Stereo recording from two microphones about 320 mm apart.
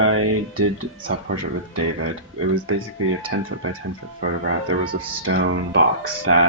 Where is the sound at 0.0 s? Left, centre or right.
Right.